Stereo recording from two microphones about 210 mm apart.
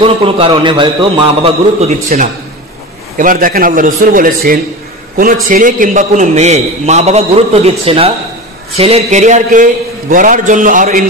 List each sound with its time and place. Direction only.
0.0 s a man's voice: 25° right (ahead or behind)